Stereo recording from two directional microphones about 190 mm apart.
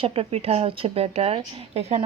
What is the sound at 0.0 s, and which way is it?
A woman's voice, 30° right (ahead or behind).